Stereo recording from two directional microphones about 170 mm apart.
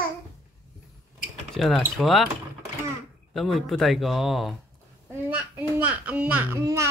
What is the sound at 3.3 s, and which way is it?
Speech, centre (ahead or behind).